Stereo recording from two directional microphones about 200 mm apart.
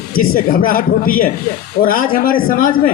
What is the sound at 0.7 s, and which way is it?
A man's voice, 45° left (ahead or behind).